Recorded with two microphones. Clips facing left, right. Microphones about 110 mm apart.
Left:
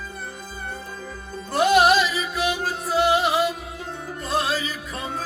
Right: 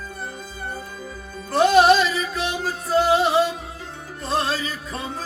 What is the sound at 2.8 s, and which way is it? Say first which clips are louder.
Music: right 2 dB; centre (ahead or behind).